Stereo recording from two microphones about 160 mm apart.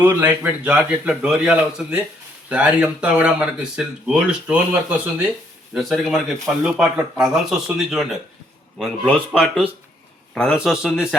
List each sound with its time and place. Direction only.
0.0 s speech: 10° right (ahead or behind)